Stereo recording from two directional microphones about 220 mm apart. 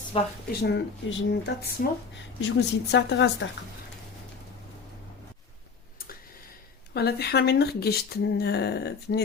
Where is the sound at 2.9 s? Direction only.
50° left (ahead or behind).